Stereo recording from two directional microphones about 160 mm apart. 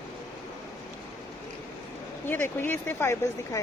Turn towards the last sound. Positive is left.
turn(degrees=15)  # may be behind; listen again after turning